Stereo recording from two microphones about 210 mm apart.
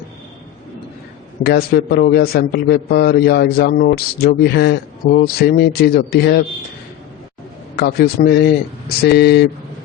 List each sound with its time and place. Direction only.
1.5 s a man's voice: 50° left (ahead or behind)
7.8 s a man's voice: 50° left (ahead or behind)